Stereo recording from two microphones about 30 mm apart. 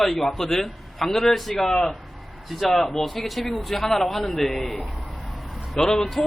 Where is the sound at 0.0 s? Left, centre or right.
Centre.